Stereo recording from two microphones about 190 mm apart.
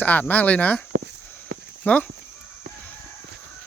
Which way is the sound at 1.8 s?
5° left (ahead or behind).